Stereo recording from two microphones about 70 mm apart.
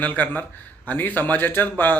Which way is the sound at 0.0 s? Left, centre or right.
Left.